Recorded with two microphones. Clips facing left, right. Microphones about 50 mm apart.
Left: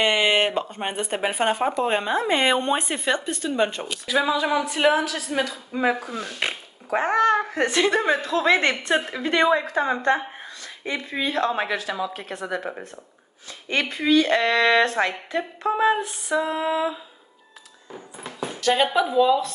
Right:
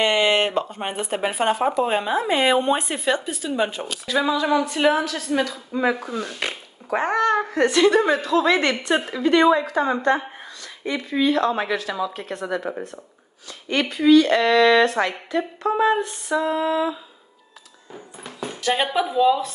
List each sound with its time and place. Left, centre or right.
0.0 s a woman's voice: centre
11.1 s a woman's voice: left; by 12.5 s centre
13.8 s a woman's voice: left
15.7 s speech: centre
18.2 s a sound: centre
18.6 s speech: centre